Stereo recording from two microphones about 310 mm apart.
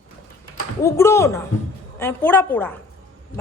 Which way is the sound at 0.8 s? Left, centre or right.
Centre.